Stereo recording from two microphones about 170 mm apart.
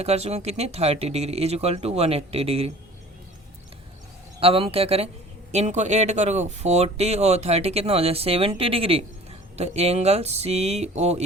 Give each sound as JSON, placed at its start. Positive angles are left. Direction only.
{"t": 0.0, "sound": "speech", "side_deg": -40}
{"t": 4.4, "sound": "speech", "side_deg": -35}